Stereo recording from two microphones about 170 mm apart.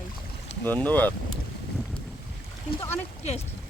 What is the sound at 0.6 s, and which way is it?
Speech, 10° left (ahead or behind).